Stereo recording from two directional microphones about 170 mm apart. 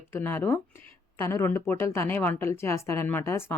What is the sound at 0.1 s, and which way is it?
A woman's voice, 15° left (ahead or behind).